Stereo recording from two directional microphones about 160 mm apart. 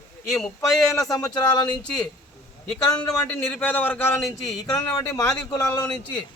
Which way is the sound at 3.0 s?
5° left (ahead or behind).